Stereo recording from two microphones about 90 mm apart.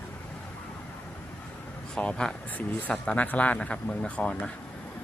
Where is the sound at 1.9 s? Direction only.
10° left (ahead or behind).